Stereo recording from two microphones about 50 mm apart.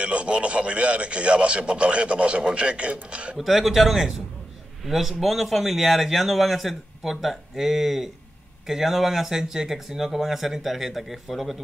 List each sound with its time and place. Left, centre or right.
0.0 s a man's voice: right
3.3 s speech: centre